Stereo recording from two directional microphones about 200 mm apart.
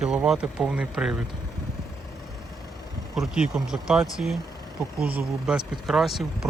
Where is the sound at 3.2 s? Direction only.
5° right (ahead or behind).